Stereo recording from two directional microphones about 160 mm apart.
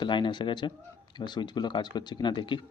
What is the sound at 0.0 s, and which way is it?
Speech, 30° left (ahead or behind).